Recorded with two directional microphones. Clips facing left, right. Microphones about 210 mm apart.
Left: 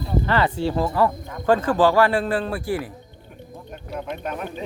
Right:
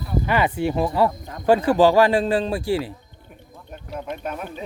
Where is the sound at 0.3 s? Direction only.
15° right (ahead or behind).